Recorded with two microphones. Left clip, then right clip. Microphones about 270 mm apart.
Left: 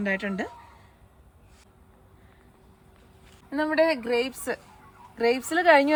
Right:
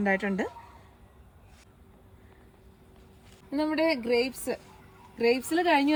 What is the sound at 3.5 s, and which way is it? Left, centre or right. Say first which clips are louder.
A woman's voice: left 4 dB; centre.